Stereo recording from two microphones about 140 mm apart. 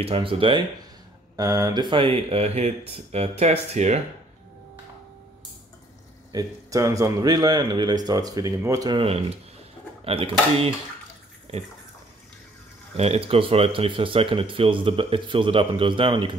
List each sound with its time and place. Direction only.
0.0 s speech: 40° right (ahead or behind)
1.3 s speech: 25° right (ahead or behind); by 4.0 s 55° right (ahead or behind)
6.3 s speech: 25° right (ahead or behind)
8.9 s speech: 45° right (ahead or behind)
12.9 s speech: 50° right (ahead or behind)